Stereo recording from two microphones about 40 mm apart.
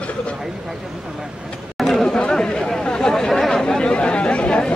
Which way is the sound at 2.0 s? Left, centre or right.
Centre.